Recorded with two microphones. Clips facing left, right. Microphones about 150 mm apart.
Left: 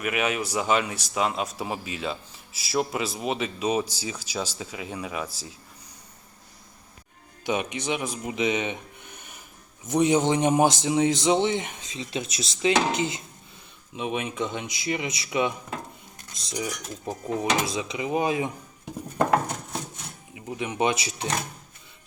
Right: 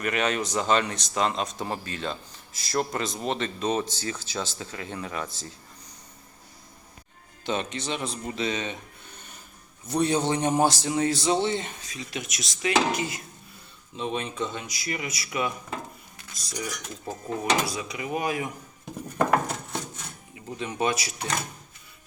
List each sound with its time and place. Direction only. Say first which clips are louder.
0.0 s speech: even; 10° left (ahead or behind)
7.4 s speech: left 2 dB; 15° left (ahead or behind)
13.9 s speech: left 1 dB; 15° left (ahead or behind)
20.3 s speech: left 3 dB; 15° left (ahead or behind)